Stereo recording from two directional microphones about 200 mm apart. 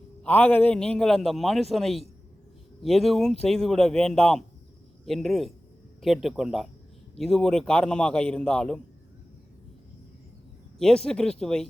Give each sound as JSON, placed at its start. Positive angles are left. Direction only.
{"t": 0.2, "sound": "a man's voice", "side_deg": 5}
{"t": 10.8, "sound": "a man's voice", "side_deg": 0}